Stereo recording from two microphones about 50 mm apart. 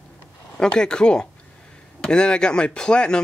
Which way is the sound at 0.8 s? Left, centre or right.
Centre.